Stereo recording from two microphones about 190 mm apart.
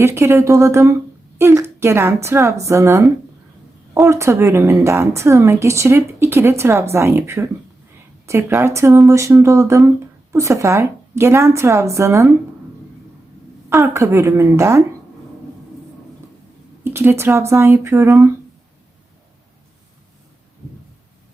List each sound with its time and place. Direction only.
0.0 s a woman's voice: 15° right (ahead or behind)
13.7 s a woman's voice: 15° right (ahead or behind)
16.8 s a woman's voice: 15° right (ahead or behind)